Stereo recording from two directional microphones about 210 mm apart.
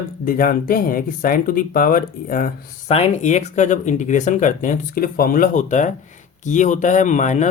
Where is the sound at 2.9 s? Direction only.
30° left (ahead or behind).